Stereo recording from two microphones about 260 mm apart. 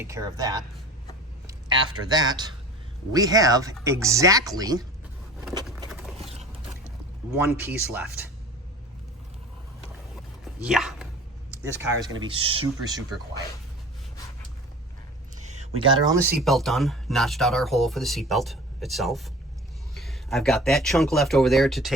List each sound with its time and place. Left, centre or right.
0.0 s a man's voice: centre
7.3 s speech: centre
10.4 s dog: centre
11.5 s speech: centre
15.4 s a sound: right
16.0 s speech: centre
16.4 s speech: centre